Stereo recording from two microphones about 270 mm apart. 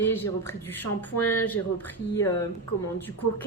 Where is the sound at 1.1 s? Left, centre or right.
Left.